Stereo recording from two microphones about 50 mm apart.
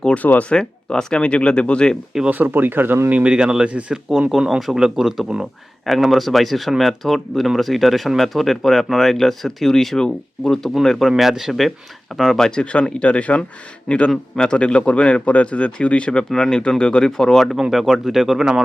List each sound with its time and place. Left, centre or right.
0.2 s speech: left
0.5 s speech: centre
2.3 s speech: right
3.1 s speech: right
3.3 s speech: centre
4.3 s speech: centre
11.2 s speech: centre
12.4 s speech: centre